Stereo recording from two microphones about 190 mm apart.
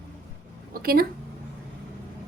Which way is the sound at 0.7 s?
50° right (ahead or behind).